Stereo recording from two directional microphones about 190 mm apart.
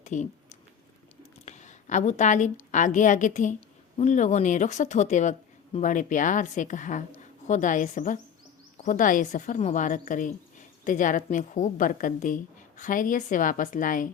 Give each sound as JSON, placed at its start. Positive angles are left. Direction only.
{"t": 0.0, "sound": "speech", "side_deg": 40}
{"t": 1.5, "sound": "a woman's voice", "side_deg": 40}